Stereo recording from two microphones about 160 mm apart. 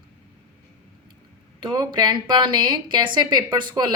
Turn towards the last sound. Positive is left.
turn(degrees=-30)  # may be behind; listen again after turning